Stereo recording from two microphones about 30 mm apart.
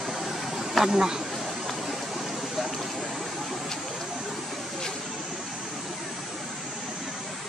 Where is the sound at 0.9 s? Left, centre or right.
Right.